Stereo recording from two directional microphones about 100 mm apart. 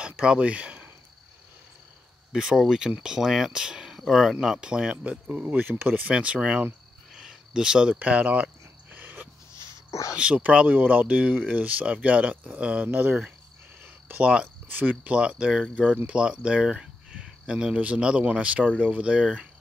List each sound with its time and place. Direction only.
0.0 s speech: 10° right (ahead or behind)
2.3 s speech: 5° right (ahead or behind)
8.9 s a sound: 15° right (ahead or behind)
10.1 s speech: 10° right (ahead or behind)